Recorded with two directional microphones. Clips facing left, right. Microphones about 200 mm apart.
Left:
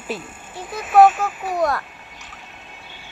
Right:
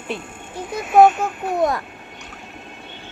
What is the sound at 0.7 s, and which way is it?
Speech, centre (ahead or behind).